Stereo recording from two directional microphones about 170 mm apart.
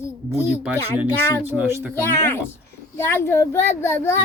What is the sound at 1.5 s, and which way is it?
Speech, 10° right (ahead or behind).